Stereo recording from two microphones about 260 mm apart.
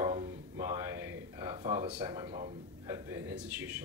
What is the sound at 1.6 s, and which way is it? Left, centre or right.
Speech, centre.